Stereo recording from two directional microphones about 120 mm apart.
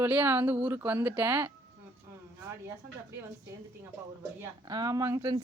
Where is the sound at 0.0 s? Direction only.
15° right (ahead or behind).